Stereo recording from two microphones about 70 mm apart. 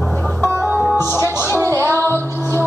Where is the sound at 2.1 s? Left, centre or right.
Left.